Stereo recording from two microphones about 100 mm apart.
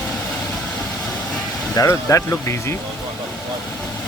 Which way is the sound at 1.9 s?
25° left (ahead or behind).